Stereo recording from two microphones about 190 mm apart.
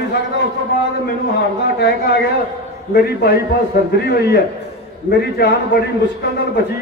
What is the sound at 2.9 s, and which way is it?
A man's voice, 55° left (ahead or behind).